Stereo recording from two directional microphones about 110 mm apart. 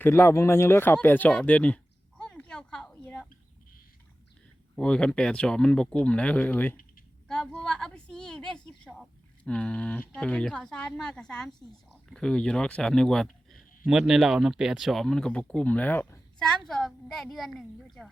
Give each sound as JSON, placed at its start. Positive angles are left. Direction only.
{"t": 0.0, "sound": "speech", "side_deg": 20}
{"t": 1.0, "sound": "a sound", "side_deg": 15}
{"t": 4.8, "sound": "speech", "side_deg": 10}
{"t": 7.3, "sound": "a sound", "side_deg": 5}
{"t": 9.0, "sound": "speech", "side_deg": 10}
{"t": 16.4, "sound": "speech", "side_deg": 5}